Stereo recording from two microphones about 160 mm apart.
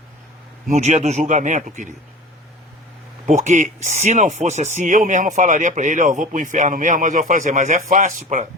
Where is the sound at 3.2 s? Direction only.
50° right (ahead or behind).